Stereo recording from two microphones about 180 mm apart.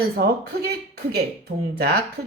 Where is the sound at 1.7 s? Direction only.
60° right (ahead or behind).